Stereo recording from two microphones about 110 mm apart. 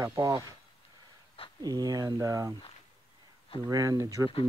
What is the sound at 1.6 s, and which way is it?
Speech, 35° right (ahead or behind).